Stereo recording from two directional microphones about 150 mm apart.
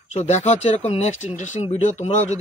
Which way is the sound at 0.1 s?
50° left (ahead or behind).